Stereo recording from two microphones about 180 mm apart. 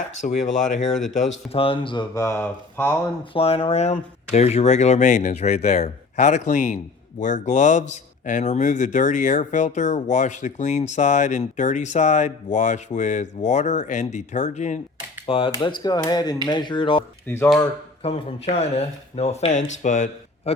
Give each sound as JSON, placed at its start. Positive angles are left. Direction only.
{"t": 0.4, "sound": "speech", "side_deg": 45}
{"t": 1.5, "sound": "speech", "side_deg": 30}
{"t": 3.3, "sound": "speech", "side_deg": 35}
{"t": 15.3, "sound": "speech", "side_deg": 30}
{"t": 17.2, "sound": "speech", "side_deg": 15}
{"t": 18.0, "sound": "speech", "side_deg": 35}